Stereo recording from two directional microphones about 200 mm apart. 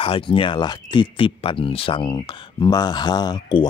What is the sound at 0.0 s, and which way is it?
Speech, 25° left (ahead or behind).